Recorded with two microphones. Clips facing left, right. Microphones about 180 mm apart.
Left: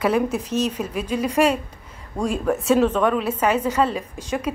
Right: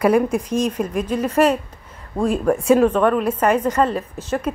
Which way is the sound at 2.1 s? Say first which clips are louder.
Right 4 dB; 5° right (ahead or behind).